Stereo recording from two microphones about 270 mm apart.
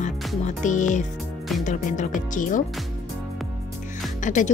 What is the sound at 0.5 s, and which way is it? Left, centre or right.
Speech, left.